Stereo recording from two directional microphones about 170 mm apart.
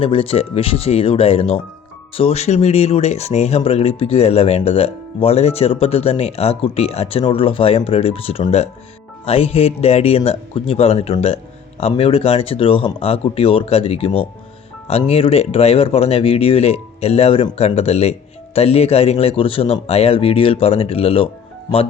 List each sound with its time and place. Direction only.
0.0 s speech: 35° left (ahead or behind)